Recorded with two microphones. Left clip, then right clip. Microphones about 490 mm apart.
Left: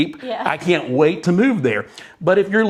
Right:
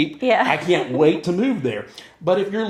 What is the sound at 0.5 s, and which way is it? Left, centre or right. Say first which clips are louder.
A man's voice: left 1 dB; left.